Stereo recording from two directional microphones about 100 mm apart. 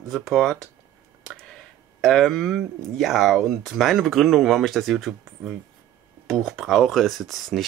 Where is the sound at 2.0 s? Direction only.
Centre (ahead or behind).